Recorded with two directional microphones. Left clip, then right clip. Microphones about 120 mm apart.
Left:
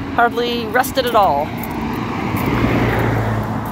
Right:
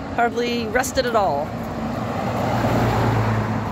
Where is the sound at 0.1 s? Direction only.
20° right (ahead or behind).